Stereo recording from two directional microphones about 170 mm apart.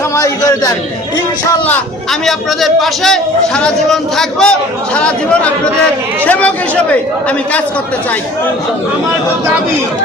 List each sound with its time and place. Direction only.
0.2 s a man's voice: 20° left (ahead or behind)
2.2 s a man's voice: centre (ahead or behind)